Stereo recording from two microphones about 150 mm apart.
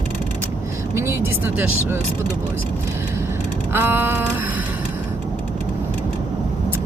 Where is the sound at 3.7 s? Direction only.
15° right (ahead or behind).